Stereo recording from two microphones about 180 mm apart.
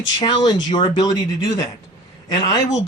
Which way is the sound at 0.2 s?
25° left (ahead or behind).